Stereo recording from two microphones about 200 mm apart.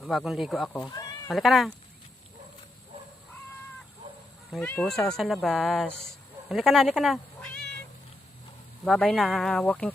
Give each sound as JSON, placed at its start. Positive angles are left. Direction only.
{"t": 0.0, "sound": "speech", "side_deg": 0}
{"t": 0.9, "sound": "cat", "side_deg": 15}
{"t": 1.3, "sound": "speech", "side_deg": 0}
{"t": 4.5, "sound": "speech", "side_deg": 5}
{"t": 8.8, "sound": "speech", "side_deg": 0}